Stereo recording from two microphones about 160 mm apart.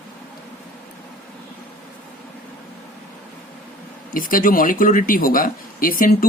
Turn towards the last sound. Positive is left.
turn(degrees=65)  # may be behind; listen again after turning